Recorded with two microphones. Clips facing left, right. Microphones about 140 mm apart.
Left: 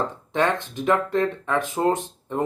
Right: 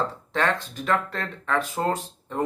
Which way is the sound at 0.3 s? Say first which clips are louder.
Left 3 dB; 20° left (ahead or behind).